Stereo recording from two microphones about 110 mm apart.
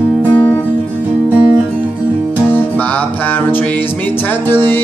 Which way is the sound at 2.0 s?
15° right (ahead or behind).